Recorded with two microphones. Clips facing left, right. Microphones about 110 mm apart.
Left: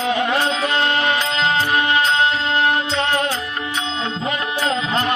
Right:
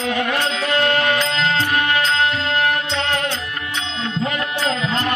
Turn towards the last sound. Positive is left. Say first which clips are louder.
# left 1 dB
turn(degrees=20)  # may be behind; listen again after turning